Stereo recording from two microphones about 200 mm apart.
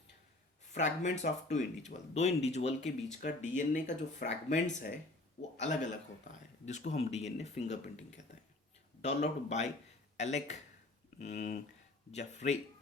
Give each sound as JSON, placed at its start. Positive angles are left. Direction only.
{"t": 0.7, "sound": "speech", "side_deg": 35}
{"t": 6.2, "sound": "speech", "side_deg": 35}
{"t": 9.0, "sound": "speech", "side_deg": 35}